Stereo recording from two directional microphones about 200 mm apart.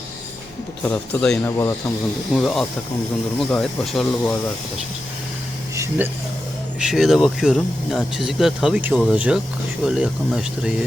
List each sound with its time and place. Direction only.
0.9 s speech: 5° left (ahead or behind)
3.3 s speech: 5° left (ahead or behind)
5.7 s a sound: 15° right (ahead or behind)
6.7 s speech: 5° right (ahead or behind)